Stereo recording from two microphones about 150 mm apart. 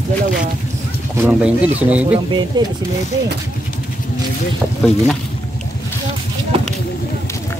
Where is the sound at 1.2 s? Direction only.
10° right (ahead or behind).